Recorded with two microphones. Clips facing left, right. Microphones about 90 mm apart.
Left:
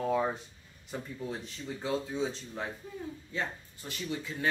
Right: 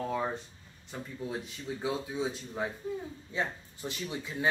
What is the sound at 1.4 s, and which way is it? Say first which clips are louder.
Speech: right 2 dB; 15° right (ahead or behind).